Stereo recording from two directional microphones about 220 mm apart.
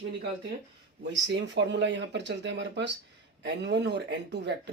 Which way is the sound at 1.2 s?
55° right (ahead or behind).